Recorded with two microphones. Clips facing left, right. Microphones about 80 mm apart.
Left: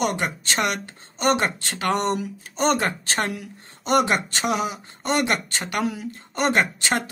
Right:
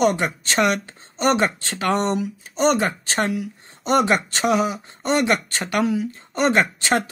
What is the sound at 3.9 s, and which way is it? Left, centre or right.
Speech, right.